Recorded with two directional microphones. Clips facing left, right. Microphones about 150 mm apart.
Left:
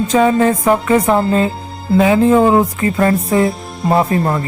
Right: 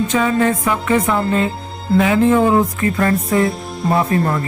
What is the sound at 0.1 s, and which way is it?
Speech, 40° left (ahead or behind).